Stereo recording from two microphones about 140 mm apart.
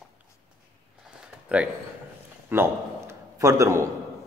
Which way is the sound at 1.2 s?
10° right (ahead or behind).